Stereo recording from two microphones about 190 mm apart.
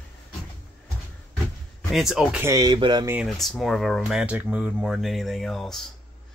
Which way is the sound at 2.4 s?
20° right (ahead or behind).